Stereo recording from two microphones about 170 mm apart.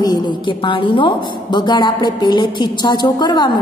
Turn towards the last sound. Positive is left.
turn(degrees=25)  # may be behind; listen again after turning